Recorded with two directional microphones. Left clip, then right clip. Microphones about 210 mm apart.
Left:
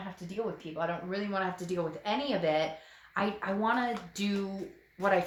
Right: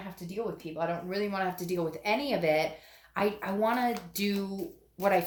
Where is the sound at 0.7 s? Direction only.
35° right (ahead or behind).